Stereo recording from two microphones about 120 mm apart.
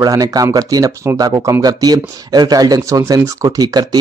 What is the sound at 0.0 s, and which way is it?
Speech, 30° right (ahead or behind).